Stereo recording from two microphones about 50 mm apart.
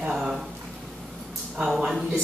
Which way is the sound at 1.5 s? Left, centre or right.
Centre.